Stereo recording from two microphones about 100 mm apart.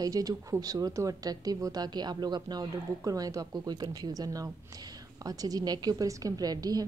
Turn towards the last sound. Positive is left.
turn(degrees=-40)  # may be behind; listen again after turning